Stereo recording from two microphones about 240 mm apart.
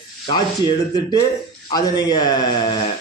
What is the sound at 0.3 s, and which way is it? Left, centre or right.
Speech, centre.